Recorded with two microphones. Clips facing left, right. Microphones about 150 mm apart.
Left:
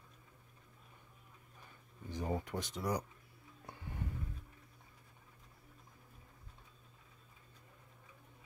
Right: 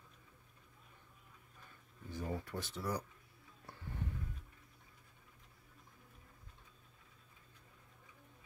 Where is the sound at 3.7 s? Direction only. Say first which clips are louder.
Left 1 dB; 15° left (ahead or behind).